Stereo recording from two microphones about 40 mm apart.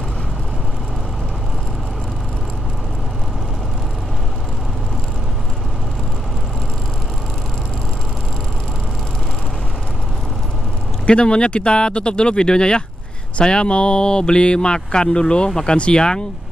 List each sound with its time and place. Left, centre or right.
11.1 s speech: left